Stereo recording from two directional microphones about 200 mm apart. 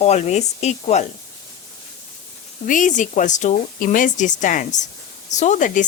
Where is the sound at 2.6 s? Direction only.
40° left (ahead or behind).